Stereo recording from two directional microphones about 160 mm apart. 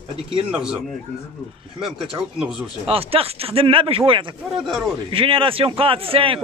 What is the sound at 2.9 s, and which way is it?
Speech, 35° right (ahead or behind).